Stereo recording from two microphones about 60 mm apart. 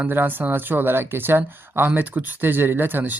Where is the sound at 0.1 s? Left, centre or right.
Right.